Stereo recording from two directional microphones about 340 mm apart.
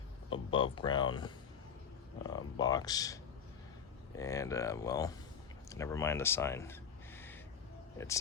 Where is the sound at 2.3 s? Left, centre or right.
Centre.